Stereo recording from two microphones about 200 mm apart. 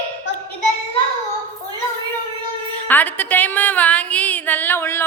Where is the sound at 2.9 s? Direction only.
10° left (ahead or behind).